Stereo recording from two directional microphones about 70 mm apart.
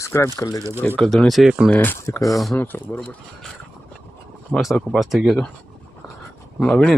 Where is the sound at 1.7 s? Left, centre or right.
Left.